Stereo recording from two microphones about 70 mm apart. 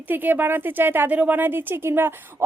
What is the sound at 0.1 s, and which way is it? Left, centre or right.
Speech, right.